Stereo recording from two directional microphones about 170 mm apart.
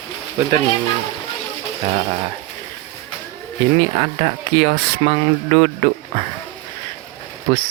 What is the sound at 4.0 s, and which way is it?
Speech, 40° right (ahead or behind).